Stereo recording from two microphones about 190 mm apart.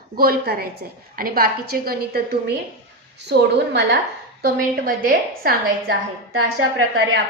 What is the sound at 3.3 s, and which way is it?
A woman's voice, 60° right (ahead or behind).